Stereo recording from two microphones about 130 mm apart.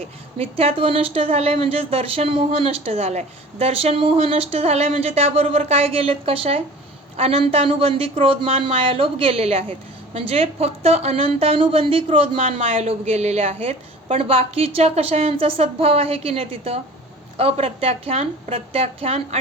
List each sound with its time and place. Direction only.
0.0 s speech: 50° right (ahead or behind)